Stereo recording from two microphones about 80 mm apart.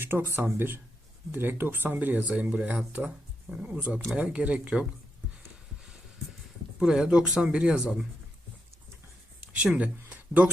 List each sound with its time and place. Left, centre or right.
0.0 s speech: right
6.7 s speech: centre
9.6 s speech: centre